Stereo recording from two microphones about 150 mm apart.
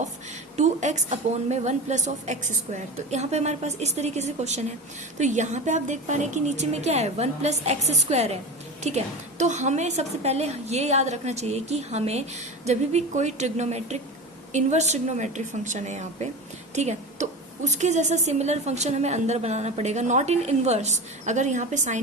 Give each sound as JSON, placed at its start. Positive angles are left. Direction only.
{"t": 0.5, "sound": "a woman's voice", "side_deg": -50}